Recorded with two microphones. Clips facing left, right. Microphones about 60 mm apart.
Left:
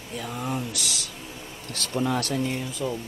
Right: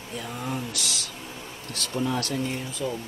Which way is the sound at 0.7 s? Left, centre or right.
Right.